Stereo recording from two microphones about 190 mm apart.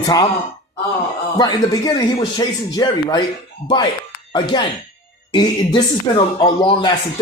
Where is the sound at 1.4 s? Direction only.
20° left (ahead or behind).